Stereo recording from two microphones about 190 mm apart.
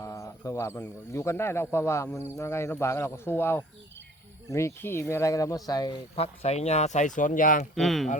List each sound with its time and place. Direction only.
0.0 s speech: 15° left (ahead or behind); by 7.7 s 45° left (ahead or behind)
7.8 s speech: centre (ahead or behind)